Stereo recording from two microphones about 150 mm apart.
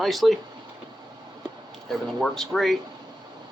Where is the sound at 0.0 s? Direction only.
Centre (ahead or behind).